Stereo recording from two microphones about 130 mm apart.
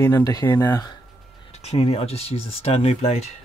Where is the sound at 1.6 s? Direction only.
50° left (ahead or behind).